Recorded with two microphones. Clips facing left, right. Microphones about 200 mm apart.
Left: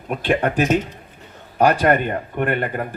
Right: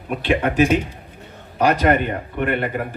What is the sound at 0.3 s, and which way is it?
Speech, 50° left (ahead or behind).